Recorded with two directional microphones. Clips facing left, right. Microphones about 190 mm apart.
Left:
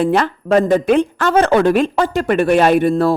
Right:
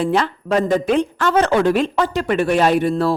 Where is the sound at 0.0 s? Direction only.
55° left (ahead or behind).